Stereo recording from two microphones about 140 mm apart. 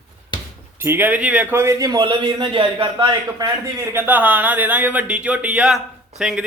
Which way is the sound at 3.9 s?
15° right (ahead or behind).